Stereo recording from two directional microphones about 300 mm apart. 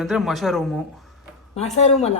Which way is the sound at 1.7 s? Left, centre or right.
Left.